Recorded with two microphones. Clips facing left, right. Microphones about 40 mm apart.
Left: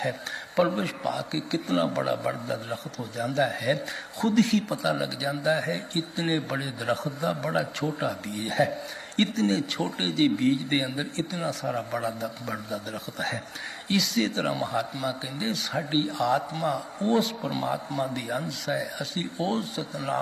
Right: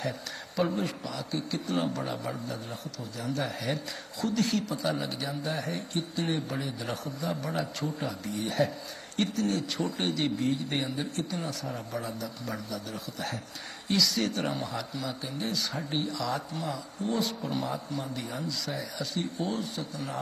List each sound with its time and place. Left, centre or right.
0.5 s speech: left